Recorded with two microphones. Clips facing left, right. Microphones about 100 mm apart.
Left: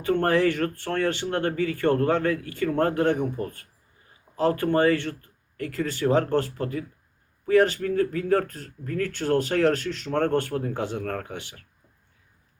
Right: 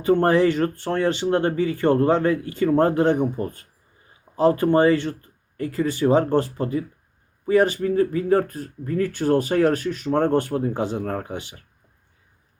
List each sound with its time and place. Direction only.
0.0 s speech: 20° right (ahead or behind)